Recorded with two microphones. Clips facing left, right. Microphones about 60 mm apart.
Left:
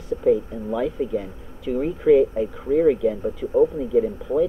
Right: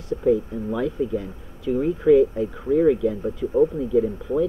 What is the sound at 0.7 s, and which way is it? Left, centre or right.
Speech, centre.